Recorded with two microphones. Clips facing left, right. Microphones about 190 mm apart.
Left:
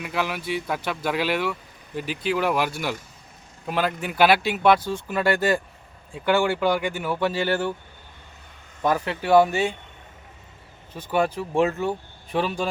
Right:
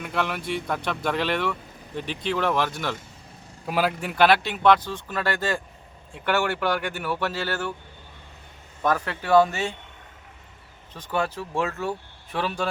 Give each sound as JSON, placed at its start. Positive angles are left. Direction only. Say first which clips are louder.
{"t": 0.0, "sound": "speech", "louder": "even", "side_deg": 5}
{"t": 3.7, "sound": "speech", "louder": "even", "side_deg": -5}
{"t": 8.8, "sound": "speech", "louder": "left 2 dB", "side_deg": 15}
{"t": 10.9, "sound": "speech", "louder": "left 4 dB", "side_deg": 15}